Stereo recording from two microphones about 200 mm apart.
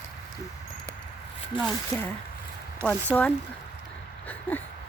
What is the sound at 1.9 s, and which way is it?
Speech, 15° left (ahead or behind).